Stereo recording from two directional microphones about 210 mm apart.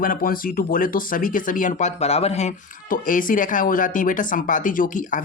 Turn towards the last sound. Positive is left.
turn(degrees=35)  # may be behind; listen again after turning